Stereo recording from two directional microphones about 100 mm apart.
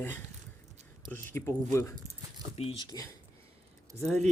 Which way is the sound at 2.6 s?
70° left (ahead or behind).